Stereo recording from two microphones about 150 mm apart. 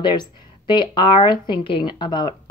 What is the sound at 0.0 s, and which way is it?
Speech, 30° left (ahead or behind).